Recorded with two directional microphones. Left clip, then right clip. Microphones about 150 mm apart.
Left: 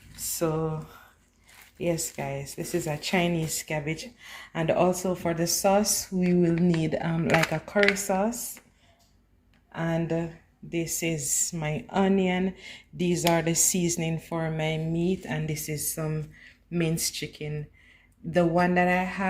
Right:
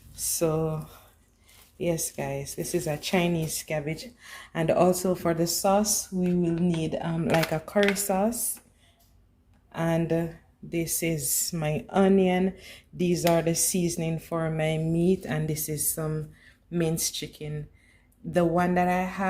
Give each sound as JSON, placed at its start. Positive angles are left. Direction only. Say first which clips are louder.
{"t": 0.3, "sound": "a sound", "louder": "right 2 dB", "side_deg": -15}
{"t": 1.8, "sound": "speech", "louder": "even", "side_deg": -5}
{"t": 5.4, "sound": "speech", "louder": "left 1 dB", "side_deg": 0}
{"t": 5.7, "sound": "speech", "louder": "even", "side_deg": 20}
{"t": 6.7, "sound": "speech", "louder": "left 2 dB", "side_deg": 35}
{"t": 7.3, "sound": "speech", "louder": "left 1 dB", "side_deg": -5}
{"t": 9.7, "sound": "speech", "louder": "right 2 dB", "side_deg": -10}
{"t": 14.8, "sound": "speech", "louder": "right 3 dB", "side_deg": -20}
{"t": 15.7, "sound": "speech", "louder": "right 1 dB", "side_deg": 0}
{"t": 16.7, "sound": "speech", "louder": "right 1 dB", "side_deg": 15}